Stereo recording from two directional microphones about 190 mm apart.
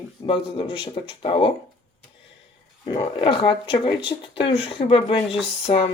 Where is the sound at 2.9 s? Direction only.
30° left (ahead or behind).